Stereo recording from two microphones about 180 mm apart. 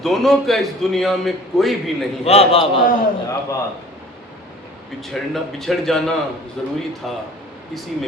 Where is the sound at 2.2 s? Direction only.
35° left (ahead or behind).